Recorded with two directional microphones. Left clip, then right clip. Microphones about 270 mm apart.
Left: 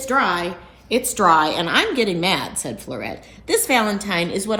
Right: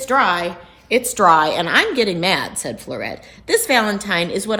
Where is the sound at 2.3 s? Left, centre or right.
Centre.